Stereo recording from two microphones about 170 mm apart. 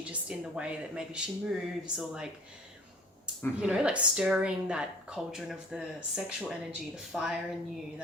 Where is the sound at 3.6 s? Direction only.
5° right (ahead or behind).